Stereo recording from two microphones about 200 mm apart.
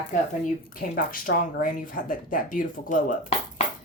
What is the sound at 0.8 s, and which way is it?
Speech, 45° left (ahead or behind).